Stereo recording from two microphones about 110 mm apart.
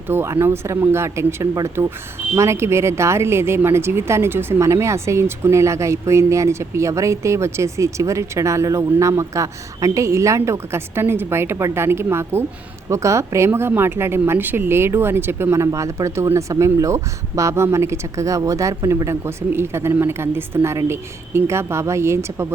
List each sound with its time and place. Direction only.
0.1 s speech: 20° right (ahead or behind)